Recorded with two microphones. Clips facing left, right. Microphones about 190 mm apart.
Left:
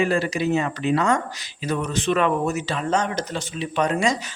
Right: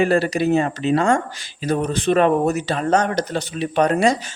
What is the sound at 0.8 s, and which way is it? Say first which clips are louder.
Speech: right 3 dB; 25° right (ahead or behind).